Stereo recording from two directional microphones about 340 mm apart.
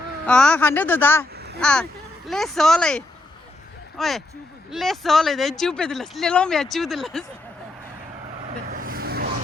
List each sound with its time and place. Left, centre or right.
0.3 s speech: centre
1.3 s a sound: right
1.6 s speech: centre
8.6 s vehicle: right